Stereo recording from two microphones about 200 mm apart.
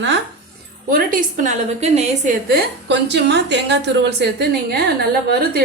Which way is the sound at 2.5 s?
55° right (ahead or behind).